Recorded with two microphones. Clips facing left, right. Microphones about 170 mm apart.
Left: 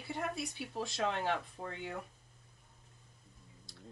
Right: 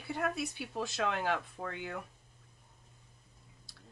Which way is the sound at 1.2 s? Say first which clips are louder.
Right 2 dB; 30° left (ahead or behind).